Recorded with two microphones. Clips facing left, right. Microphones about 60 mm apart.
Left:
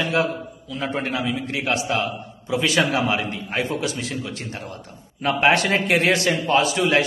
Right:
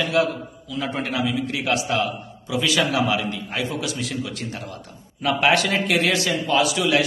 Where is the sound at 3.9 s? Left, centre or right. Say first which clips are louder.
Right 1 dB; left.